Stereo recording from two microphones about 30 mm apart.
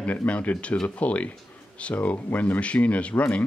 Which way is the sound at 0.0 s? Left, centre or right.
Left.